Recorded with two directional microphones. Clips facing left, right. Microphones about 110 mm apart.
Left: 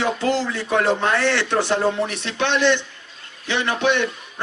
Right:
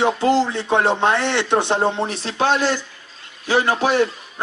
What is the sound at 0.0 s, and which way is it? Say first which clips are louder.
A man's voice: right 4 dB; 25° right (ahead or behind).